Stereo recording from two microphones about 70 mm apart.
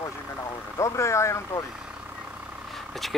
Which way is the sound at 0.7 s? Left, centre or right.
Left.